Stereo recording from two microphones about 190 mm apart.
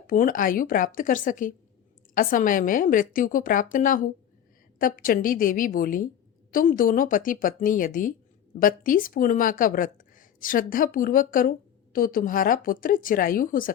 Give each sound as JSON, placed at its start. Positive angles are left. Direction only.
{"t": 0.1, "sound": "speech", "side_deg": 45}